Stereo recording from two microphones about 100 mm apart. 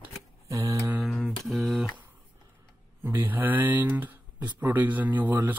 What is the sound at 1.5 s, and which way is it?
Speech, centre (ahead or behind).